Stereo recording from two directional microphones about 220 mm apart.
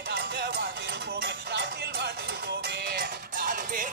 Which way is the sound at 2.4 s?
50° right (ahead or behind).